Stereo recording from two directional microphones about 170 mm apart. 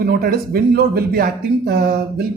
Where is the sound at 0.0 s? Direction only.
65° right (ahead or behind).